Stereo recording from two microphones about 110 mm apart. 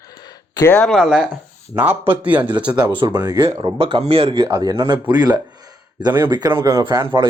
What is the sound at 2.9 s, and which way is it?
Speech, 50° right (ahead or behind).